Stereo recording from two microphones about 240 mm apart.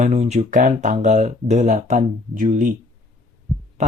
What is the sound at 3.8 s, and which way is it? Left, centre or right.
Speech, right.